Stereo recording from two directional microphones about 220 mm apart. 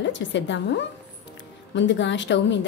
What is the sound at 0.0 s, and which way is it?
A woman's voice, 55° left (ahead or behind).